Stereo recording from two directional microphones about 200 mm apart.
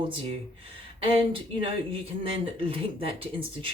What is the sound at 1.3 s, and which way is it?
Speech, 25° right (ahead or behind).